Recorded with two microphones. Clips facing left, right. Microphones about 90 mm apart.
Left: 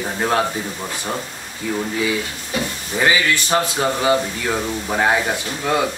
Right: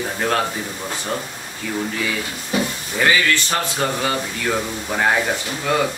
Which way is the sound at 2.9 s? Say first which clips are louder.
Even; 15° left (ahead or behind).